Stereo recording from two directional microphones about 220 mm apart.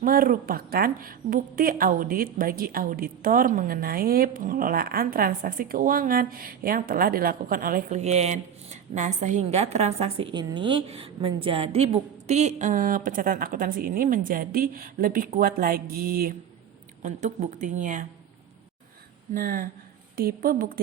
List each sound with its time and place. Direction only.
0.0 s a woman's voice: 40° right (ahead or behind)
19.3 s a woman's voice: 40° right (ahead or behind)